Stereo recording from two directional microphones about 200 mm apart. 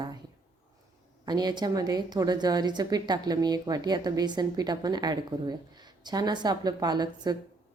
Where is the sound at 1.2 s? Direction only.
20° right (ahead or behind).